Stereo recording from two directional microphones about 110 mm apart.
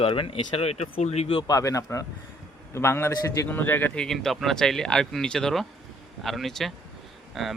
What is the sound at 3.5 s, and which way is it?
Speech, 20° left (ahead or behind).